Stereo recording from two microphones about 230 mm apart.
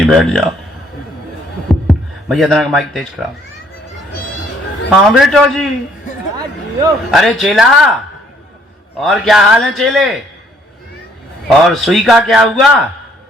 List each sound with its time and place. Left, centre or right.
0.0 s a man's voice: centre
1.9 s speech: centre
4.9 s a man's voice: centre
7.1 s a man's voice: centre
9.0 s a man's voice: centre
11.4 s a man's voice: centre